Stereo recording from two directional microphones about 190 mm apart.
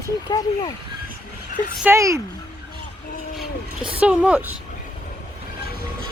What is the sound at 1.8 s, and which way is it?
Speech, 15° right (ahead or behind).